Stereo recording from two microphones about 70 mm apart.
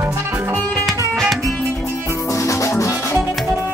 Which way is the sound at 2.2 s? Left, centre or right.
Left.